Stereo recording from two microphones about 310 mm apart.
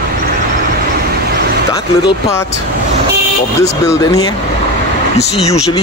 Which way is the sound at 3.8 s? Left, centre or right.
Centre.